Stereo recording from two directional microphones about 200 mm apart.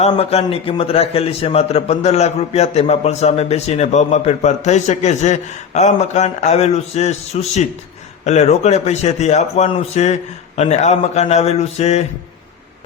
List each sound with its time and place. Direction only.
0.0 s a man's voice: 30° left (ahead or behind)